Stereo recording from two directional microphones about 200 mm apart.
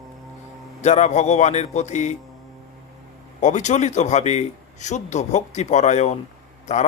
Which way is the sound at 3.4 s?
35° left (ahead or behind).